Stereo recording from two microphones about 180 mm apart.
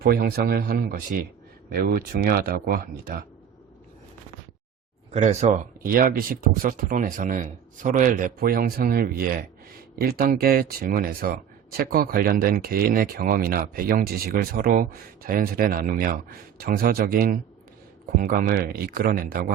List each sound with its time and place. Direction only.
0.0 s speech: 60° right (ahead or behind)
5.1 s speech: 40° right (ahead or behind); by 19.5 s 55° right (ahead or behind)